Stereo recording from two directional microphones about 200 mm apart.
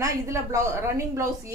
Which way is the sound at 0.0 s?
15° right (ahead or behind).